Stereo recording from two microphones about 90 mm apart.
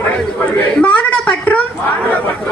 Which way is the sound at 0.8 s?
15° left (ahead or behind).